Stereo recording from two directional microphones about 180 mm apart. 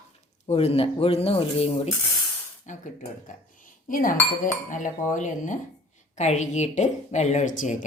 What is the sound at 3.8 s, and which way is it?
A woman's voice, 50° left (ahead or behind).